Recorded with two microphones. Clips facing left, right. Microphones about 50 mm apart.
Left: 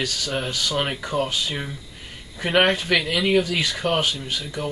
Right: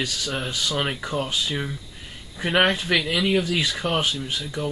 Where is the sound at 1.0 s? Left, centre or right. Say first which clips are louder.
Left 2 dB; centre.